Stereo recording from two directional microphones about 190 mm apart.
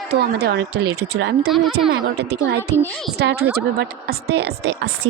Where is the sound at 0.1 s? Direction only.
60° right (ahead or behind).